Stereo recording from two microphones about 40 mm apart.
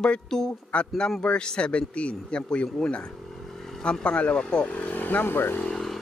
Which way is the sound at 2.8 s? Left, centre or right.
Centre.